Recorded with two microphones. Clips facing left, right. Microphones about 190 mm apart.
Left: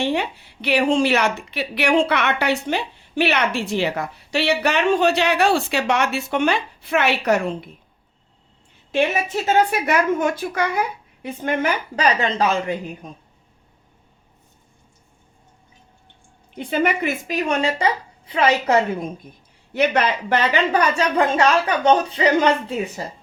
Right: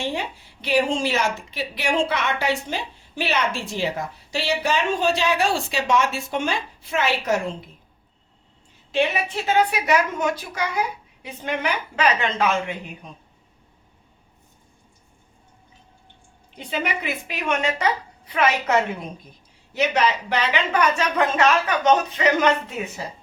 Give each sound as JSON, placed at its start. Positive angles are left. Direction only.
{"t": 0.0, "sound": "a woman's voice", "side_deg": 65}
{"t": 8.9, "sound": "a woman's voice", "side_deg": 45}
{"t": 16.6, "sound": "a woman's voice", "side_deg": 50}
{"t": 19.7, "sound": "a woman's voice", "side_deg": 55}